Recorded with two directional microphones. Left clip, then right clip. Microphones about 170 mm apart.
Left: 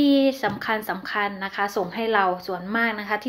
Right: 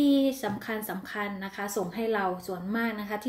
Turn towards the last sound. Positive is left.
turn(degrees=-20)  # may be behind; listen again after turning